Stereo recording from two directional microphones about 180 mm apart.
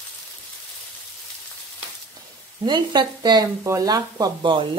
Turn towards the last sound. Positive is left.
turn(degrees=-25)  # may be behind; listen again after turning